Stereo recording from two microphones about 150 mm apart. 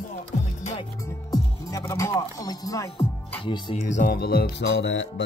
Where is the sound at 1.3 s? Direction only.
20° left (ahead or behind).